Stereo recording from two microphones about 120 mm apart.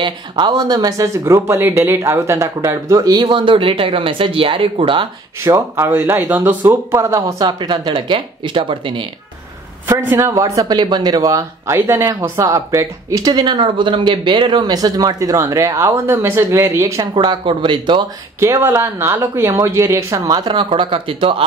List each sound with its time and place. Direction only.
0.0 s speech: 40° right (ahead or behind)
5.4 s speech: 20° right (ahead or behind); by 9.0 s 45° right (ahead or behind)
9.8 s speech: 20° right (ahead or behind)
17.1 s speech: 40° right (ahead or behind)
18.4 s speech: 25° right (ahead or behind); by 21.5 s 50° right (ahead or behind)